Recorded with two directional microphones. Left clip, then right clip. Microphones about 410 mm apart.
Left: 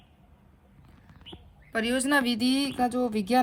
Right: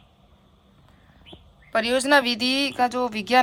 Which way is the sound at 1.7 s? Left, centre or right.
Centre.